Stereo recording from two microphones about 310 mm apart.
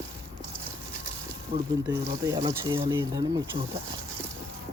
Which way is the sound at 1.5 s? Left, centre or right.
Centre.